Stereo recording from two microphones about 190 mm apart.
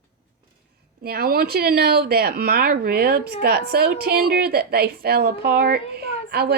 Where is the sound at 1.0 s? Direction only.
55° right (ahead or behind).